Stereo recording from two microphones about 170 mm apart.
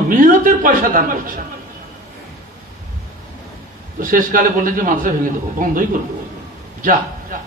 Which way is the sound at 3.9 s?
55° right (ahead or behind).